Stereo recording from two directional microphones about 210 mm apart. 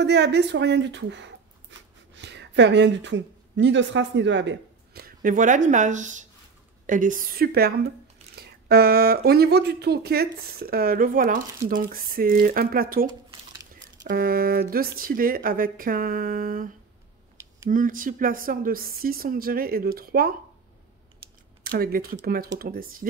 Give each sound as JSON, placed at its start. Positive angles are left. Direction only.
{"t": 0.0, "sound": "speech", "side_deg": -55}
{"t": 21.6, "sound": "speech", "side_deg": -45}